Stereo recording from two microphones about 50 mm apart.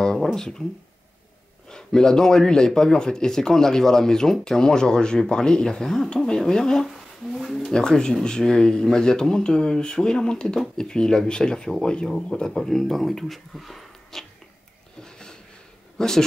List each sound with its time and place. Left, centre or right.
0.0 s speech: centre
1.7 s speech: centre
6.9 s speech: centre
7.7 s speech: centre
15.0 s a sound: centre
16.0 s speech: centre